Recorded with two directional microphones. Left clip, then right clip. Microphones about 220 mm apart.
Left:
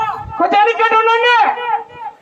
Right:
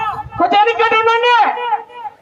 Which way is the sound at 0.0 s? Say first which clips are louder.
Even; 40° right (ahead or behind).